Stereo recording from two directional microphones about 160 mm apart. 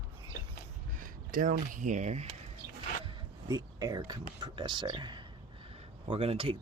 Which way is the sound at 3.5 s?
20° right (ahead or behind).